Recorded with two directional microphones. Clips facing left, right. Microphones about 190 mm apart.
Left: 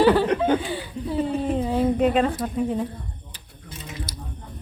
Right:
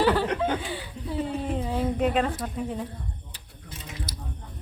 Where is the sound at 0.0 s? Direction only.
15° left (ahead or behind).